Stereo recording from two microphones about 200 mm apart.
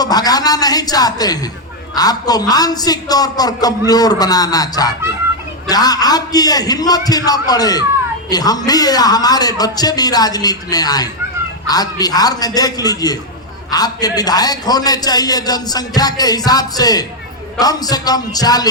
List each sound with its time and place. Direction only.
0.0 s a man's voice: 20° left (ahead or behind)